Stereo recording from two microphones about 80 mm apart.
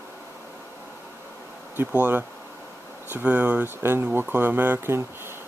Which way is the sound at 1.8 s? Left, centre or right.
Right.